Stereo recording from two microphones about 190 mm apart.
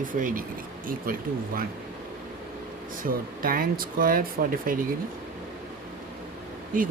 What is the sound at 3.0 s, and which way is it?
Speech, 50° right (ahead or behind).